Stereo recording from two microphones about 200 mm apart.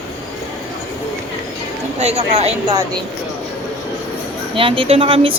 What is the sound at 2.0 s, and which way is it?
Speech, 35° right (ahead or behind).